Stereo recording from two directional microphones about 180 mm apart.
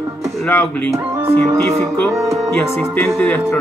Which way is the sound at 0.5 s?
15° left (ahead or behind).